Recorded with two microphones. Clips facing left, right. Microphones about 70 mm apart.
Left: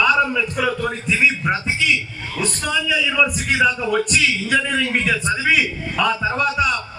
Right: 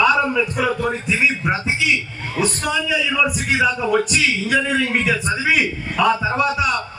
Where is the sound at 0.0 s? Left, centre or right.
Centre.